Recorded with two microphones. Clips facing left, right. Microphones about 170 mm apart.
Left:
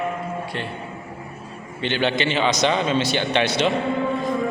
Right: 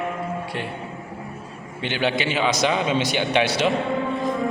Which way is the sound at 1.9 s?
10° right (ahead or behind).